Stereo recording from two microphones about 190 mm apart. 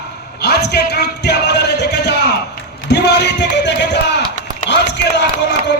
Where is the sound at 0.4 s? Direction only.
60° left (ahead or behind).